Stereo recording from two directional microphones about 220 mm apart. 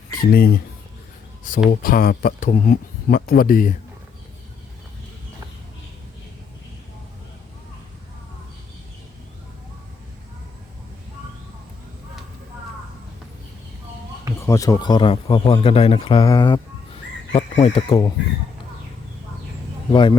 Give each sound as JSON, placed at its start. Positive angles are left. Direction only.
{"t": 0.1, "sound": "speech", "side_deg": 40}
{"t": 14.4, "sound": "speech", "side_deg": 15}
{"t": 19.9, "sound": "speech", "side_deg": 20}